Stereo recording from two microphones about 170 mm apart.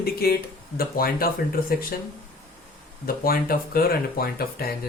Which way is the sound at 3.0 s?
60° left (ahead or behind).